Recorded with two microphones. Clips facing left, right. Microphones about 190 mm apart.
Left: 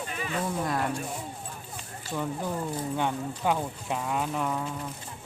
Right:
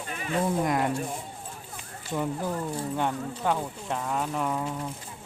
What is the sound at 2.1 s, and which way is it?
Speech, 5° right (ahead or behind).